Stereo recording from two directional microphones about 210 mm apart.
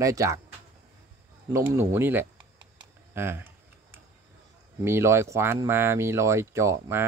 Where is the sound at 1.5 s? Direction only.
10° right (ahead or behind).